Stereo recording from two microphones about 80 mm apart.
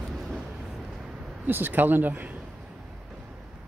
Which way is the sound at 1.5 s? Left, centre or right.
Right.